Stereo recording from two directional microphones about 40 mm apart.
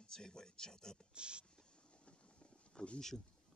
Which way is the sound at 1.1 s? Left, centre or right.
Right.